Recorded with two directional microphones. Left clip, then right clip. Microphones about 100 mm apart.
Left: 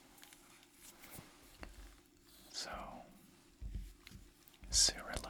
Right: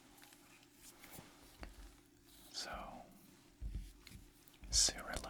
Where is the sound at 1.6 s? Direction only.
15° left (ahead or behind).